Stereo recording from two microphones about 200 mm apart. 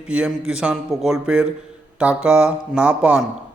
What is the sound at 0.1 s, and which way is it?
Speech, 5° right (ahead or behind).